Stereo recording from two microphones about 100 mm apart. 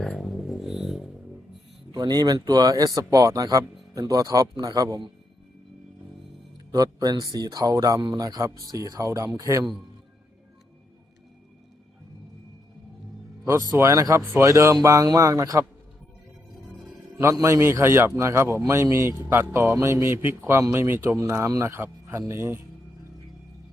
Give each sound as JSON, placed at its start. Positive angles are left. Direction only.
{"t": 0.2, "sound": "a sound", "side_deg": 0}
{"t": 1.9, "sound": "speech", "side_deg": -45}
{"t": 6.7, "sound": "speech", "side_deg": -40}
{"t": 13.4, "sound": "speech", "side_deg": -35}
{"t": 17.4, "sound": "speech", "side_deg": -25}